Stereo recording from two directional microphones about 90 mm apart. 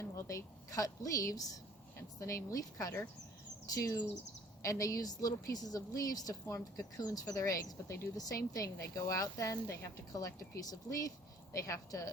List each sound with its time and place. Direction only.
0.0 s a woman's voice: 35° left (ahead or behind)